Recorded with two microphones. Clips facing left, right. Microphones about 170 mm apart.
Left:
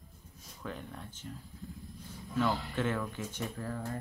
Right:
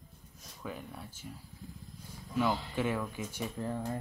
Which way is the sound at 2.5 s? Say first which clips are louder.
Even; 10° right (ahead or behind).